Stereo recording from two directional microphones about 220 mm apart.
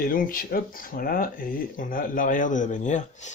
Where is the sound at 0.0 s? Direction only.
40° left (ahead or behind).